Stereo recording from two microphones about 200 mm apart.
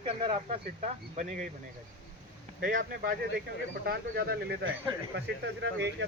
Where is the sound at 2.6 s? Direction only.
45° right (ahead or behind); by 6.1 s 60° right (ahead or behind).